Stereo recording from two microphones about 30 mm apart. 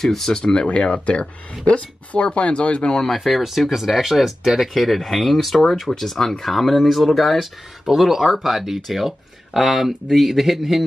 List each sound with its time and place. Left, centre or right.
0.0 s speech: centre
0.4 s speech: left
0.7 s speech: left
3.3 s speech: centre